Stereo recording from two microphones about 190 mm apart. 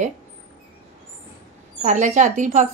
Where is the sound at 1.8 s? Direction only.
40° right (ahead or behind).